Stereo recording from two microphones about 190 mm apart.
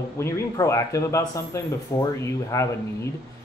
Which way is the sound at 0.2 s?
15° left (ahead or behind).